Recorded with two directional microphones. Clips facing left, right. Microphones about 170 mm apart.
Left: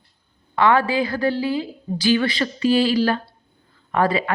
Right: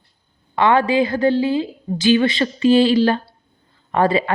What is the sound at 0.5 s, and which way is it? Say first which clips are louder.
A woman's voice: right 2 dB; 20° right (ahead or behind).